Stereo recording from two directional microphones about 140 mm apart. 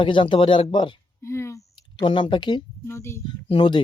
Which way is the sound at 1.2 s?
20° left (ahead or behind).